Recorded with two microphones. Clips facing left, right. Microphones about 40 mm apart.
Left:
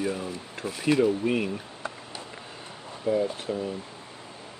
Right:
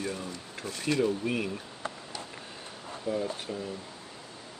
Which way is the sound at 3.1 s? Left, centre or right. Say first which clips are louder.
Left 6 dB; left.